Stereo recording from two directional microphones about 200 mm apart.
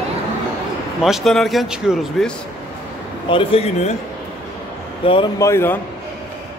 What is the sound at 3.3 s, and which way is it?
Speech, 25° left (ahead or behind).